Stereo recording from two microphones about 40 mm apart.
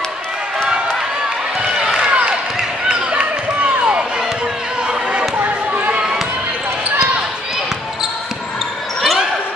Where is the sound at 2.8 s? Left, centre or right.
Right.